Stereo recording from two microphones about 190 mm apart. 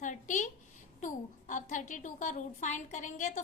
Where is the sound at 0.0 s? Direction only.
40° left (ahead or behind).